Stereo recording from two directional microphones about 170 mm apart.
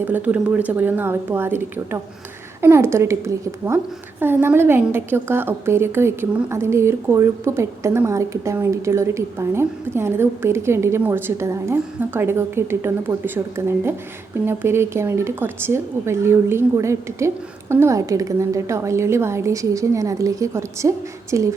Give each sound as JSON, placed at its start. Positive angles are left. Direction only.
{"t": 0.0, "sound": "a woman's voice", "side_deg": -10}